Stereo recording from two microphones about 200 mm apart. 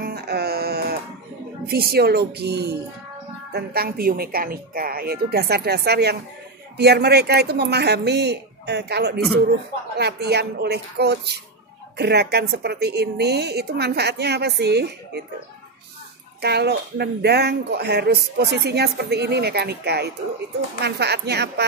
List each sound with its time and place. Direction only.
0.0 s music: 50° right (ahead or behind)
1.7 s speech: 50° right (ahead or behind)
16.3 s speech: 55° right (ahead or behind)